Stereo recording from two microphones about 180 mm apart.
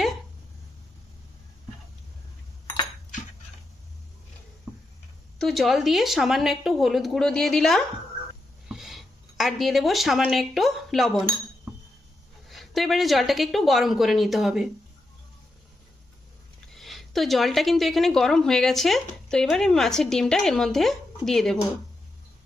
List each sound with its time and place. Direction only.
5.4 s a woman's voice: centre (ahead or behind)
12.5 s a woman's voice: centre (ahead or behind)
16.7 s a woman's voice: centre (ahead or behind)